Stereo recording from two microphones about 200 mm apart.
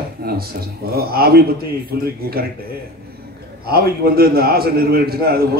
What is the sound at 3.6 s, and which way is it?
A man's voice, 50° right (ahead or behind).